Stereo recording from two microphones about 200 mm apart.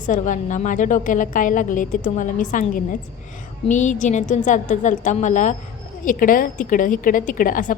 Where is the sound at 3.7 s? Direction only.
35° left (ahead or behind).